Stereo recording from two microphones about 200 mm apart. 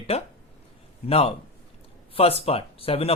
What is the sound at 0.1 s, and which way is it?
Speech, 30° left (ahead or behind).